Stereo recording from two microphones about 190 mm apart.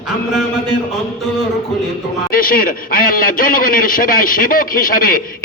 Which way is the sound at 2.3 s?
50° left (ahead or behind).